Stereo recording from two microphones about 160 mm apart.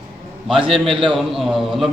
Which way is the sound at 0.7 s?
Centre (ahead or behind).